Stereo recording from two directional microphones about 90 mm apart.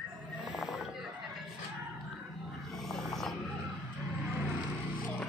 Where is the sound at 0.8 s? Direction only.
5° right (ahead or behind).